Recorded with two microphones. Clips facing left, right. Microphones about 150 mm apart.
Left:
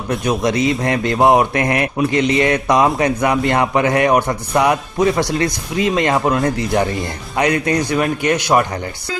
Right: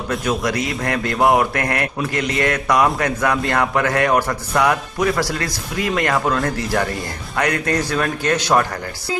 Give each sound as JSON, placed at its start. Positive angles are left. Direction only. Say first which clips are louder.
{"t": 0.1, "sound": "a man's voice", "louder": "left 4 dB", "side_deg": 25}